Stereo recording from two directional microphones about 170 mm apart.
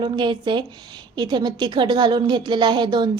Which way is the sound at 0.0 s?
25° right (ahead or behind).